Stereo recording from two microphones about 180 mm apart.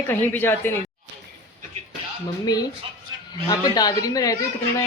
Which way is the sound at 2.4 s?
20° left (ahead or behind).